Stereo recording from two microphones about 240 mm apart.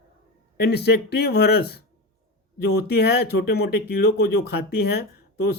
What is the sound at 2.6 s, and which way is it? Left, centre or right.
Speech, left.